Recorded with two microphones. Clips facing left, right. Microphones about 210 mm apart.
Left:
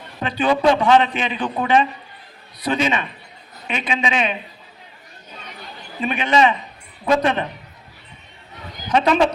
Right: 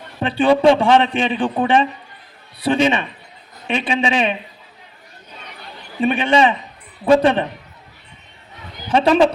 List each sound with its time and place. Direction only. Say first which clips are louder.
0.2 s a man's voice: right 4 dB; 30° right (ahead or behind)
6.0 s speech: right 3 dB; 30° right (ahead or behind)
8.9 s a man's voice: right 3 dB; 30° right (ahead or behind)